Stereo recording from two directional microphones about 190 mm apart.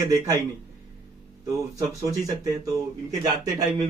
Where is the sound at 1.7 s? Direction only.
15° right (ahead or behind).